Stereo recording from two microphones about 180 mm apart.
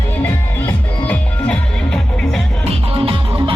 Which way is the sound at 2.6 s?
30° right (ahead or behind).